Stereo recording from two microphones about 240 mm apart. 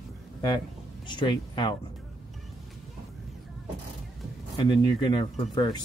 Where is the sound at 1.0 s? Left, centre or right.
Centre.